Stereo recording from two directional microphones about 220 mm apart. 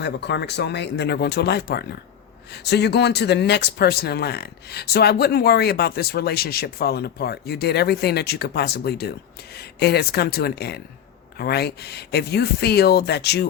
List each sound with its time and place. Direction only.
0.0 s speech: 50° left (ahead or behind)